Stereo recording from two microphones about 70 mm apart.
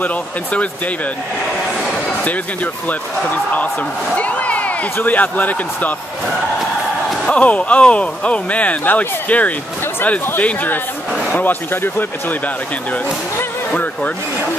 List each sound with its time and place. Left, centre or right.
0.0 s speech: left
2.2 s speech: left
4.2 s a sound: left
4.9 s speech: left
7.2 s speech: centre
13.4 s speech: left